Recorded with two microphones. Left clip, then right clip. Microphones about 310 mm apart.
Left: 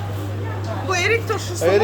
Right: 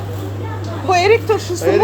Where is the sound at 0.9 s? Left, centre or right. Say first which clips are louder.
Right 7 dB; centre.